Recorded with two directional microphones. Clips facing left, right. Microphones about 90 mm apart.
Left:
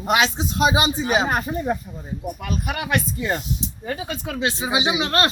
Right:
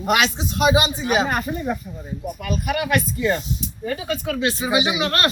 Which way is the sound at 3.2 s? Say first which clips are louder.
Right 3 dB; 5° left (ahead or behind).